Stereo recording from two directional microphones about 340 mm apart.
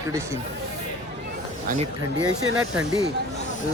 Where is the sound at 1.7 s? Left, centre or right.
Right.